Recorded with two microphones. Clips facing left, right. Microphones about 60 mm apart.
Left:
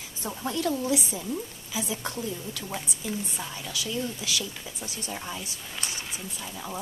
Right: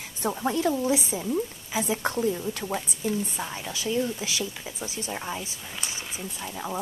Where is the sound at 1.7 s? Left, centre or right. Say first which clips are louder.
Right 5 dB; right.